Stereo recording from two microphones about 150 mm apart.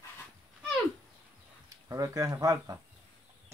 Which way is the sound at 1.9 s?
20° right (ahead or behind).